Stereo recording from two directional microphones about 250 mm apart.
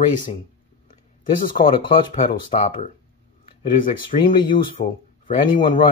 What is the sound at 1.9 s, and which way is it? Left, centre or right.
Speech, left.